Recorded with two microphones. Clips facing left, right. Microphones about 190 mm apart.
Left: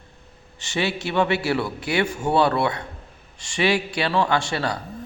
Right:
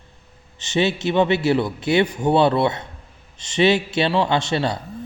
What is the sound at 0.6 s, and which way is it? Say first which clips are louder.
A man's voice: right 5 dB; 20° right (ahead or behind).